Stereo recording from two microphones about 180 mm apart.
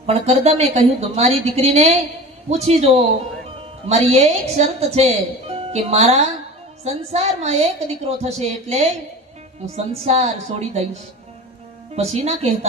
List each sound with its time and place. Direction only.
0.0 s speech: 35° right (ahead or behind)
11.9 s speech: 35° right (ahead or behind)